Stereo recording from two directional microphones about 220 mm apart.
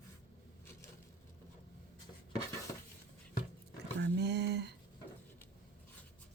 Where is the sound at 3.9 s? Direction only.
50° right (ahead or behind).